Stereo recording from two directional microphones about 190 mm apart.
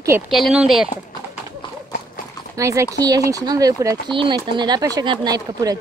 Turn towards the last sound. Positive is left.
turn(degrees=-20)  # may be behind; listen again after turning